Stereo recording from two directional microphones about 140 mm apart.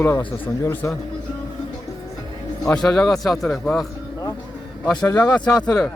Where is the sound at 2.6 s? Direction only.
5° left (ahead or behind).